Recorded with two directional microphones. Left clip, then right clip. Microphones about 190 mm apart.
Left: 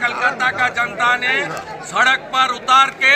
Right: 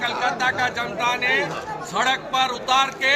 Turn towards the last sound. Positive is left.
turn(degrees=-5)  # may be behind; listen again after turning